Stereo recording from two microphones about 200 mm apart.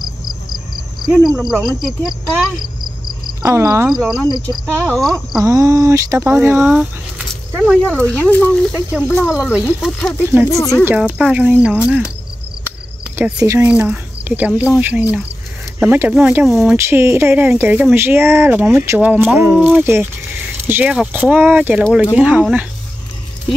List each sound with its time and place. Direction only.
1.8 s speech: centre (ahead or behind)
3.4 s speech: 15° right (ahead or behind)
4.8 s speech: centre (ahead or behind)
5.4 s speech: 15° right (ahead or behind)
7.8 s speech: 5° left (ahead or behind)
8.7 s speech: 5° right (ahead or behind)
10.5 s speech: 15° left (ahead or behind)
10.9 s speech: 5° right (ahead or behind)
13.1 s speech: 10° right (ahead or behind)